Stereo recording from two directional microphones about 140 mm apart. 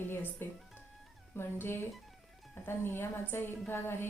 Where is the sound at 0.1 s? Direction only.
15° left (ahead or behind).